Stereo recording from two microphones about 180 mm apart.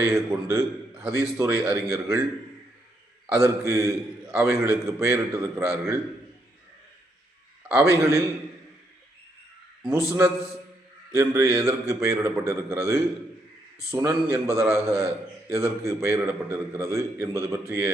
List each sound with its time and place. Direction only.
0.1 s a man's voice: 15° right (ahead or behind)
3.2 s a man's voice: 15° right (ahead or behind)
7.7 s a man's voice: 15° right (ahead or behind)
10.1 s a man's voice: 15° right (ahead or behind)